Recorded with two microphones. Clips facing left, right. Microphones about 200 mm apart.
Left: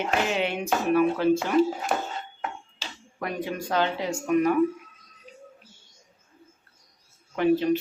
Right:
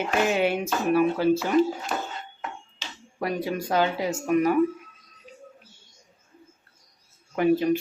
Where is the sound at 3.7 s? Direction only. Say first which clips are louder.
Right 2 dB; 10° right (ahead or behind).